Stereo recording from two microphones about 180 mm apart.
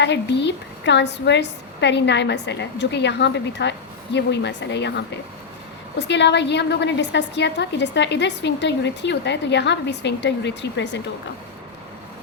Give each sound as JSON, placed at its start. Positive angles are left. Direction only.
{"t": 0.0, "sound": "a woman's voice", "side_deg": 75}